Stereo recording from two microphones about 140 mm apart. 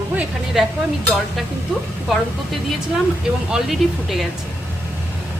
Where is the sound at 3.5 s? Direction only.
Centre (ahead or behind).